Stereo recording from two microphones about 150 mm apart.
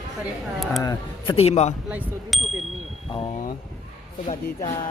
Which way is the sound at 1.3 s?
45° left (ahead or behind).